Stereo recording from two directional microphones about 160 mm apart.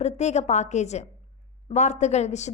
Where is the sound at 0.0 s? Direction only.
45° left (ahead or behind).